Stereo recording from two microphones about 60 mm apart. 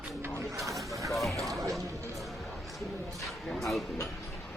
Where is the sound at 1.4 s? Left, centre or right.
Right.